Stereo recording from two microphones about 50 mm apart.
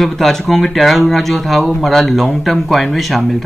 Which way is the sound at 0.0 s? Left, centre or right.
Centre.